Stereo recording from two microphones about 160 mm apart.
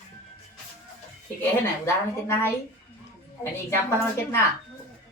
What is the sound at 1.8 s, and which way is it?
Speech, 15° left (ahead or behind).